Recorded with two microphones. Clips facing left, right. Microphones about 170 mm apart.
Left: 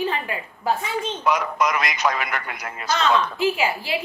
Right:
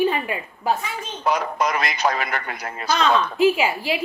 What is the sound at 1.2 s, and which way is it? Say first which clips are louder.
Speech: right 1 dB; 30° right (ahead or behind).